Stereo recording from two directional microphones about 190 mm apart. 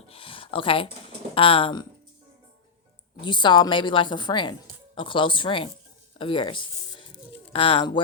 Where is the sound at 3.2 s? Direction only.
25° left (ahead or behind).